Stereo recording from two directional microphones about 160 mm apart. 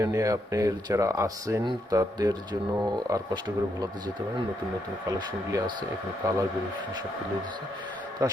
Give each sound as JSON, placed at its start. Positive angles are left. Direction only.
{"t": 0.0, "sound": "speech", "side_deg": -20}
{"t": 5.0, "sound": "speech", "side_deg": -20}
{"t": 8.2, "sound": "speech", "side_deg": -25}